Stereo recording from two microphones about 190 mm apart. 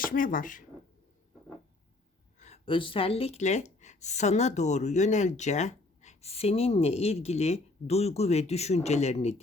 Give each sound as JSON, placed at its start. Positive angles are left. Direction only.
{"t": 0.0, "sound": "speech", "side_deg": 45}
{"t": 2.4, "sound": "speech", "side_deg": 30}